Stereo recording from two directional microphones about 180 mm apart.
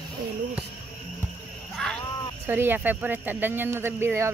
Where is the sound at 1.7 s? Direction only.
5° left (ahead or behind).